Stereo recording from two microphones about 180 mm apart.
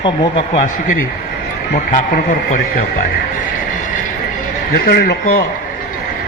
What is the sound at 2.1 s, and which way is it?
Speech, 50° left (ahead or behind).